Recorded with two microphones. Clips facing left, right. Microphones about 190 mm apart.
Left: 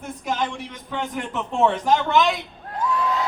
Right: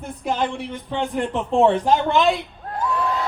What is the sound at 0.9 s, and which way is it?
A man's voice, 30° right (ahead or behind).